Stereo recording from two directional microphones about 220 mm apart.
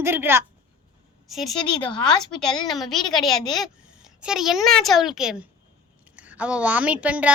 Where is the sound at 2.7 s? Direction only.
Centre (ahead or behind).